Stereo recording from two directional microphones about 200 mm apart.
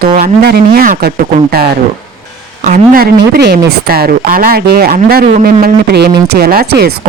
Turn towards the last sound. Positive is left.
turn(degrees=-50)  # may be behind; listen again after turning